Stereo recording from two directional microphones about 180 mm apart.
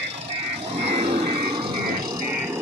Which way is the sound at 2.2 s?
10° right (ahead or behind).